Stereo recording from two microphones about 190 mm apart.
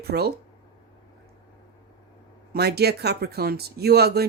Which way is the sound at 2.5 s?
55° right (ahead or behind).